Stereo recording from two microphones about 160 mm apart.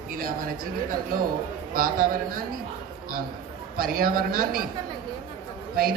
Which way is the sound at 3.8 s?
65° right (ahead or behind).